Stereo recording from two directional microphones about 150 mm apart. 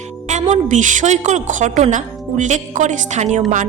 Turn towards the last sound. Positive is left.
turn(degrees=-50)  # may be behind; listen again after turning